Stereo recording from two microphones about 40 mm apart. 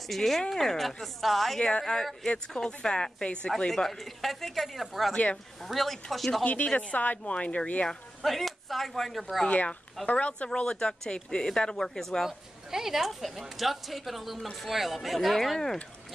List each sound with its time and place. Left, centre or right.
0.1 s a woman's voice: centre
1.6 s a woman's voice: left; by 5.1 s centre
5.1 s speech: left
5.6 s a woman's voice: centre
6.4 s speech: left
8.2 s a woman's voice: centre
10.1 s speech: left
10.5 s speech: left
12.3 s a woman's voice: centre